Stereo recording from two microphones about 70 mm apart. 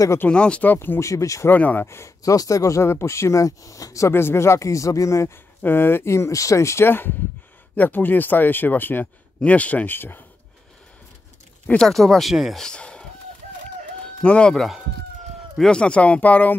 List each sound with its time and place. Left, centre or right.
0.3 s speech: centre
0.7 s speech: left
1.5 s speech: left
1.9 s speech: left
4.1 s speech: left
5.6 s speech: left
9.9 s speech: left
11.8 s speech: centre
12.6 s speech: centre
14.0 s chicken: centre
14.5 s speech: centre; by 16.5 s left